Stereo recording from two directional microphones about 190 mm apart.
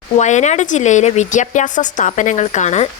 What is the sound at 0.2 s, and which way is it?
Speech, 40° left (ahead or behind).